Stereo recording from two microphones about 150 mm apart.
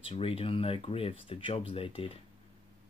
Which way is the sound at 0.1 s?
40° left (ahead or behind).